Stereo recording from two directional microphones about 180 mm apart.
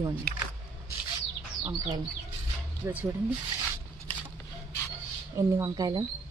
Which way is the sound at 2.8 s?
10° right (ahead or behind).